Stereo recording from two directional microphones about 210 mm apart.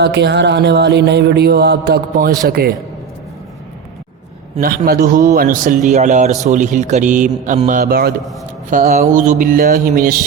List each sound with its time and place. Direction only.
0.0 s mantra: 55° right (ahead or behind)
4.6 s mantra: 45° right (ahead or behind)
5.3 s a man's voice: 40° right (ahead or behind)
7.7 s mantra: 45° right (ahead or behind)
8.7 s a man's voice: 40° right (ahead or behind)